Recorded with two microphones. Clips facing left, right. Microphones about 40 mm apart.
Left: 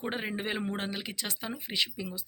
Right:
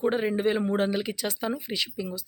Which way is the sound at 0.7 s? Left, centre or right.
Centre.